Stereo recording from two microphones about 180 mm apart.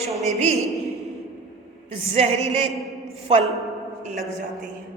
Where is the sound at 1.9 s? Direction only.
35° right (ahead or behind).